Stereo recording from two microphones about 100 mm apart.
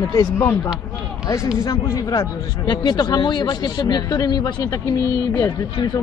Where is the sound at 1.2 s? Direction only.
30° left (ahead or behind); by 5.9 s 50° left (ahead or behind).